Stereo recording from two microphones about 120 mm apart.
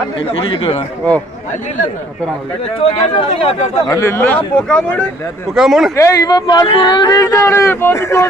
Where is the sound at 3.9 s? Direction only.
25° left (ahead or behind).